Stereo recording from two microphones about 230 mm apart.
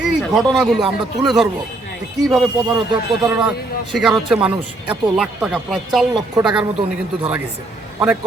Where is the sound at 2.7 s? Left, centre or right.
Centre.